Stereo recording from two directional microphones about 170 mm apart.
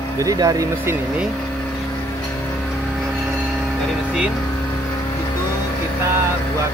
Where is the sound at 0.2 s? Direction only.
20° right (ahead or behind).